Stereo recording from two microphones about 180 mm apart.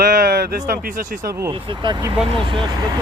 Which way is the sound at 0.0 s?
60° right (ahead or behind).